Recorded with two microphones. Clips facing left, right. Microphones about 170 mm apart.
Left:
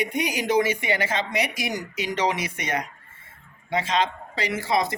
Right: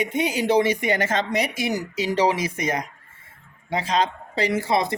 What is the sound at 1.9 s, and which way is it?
Speech, 30° right (ahead or behind).